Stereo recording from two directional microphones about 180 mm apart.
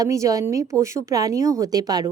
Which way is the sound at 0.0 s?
20° right (ahead or behind).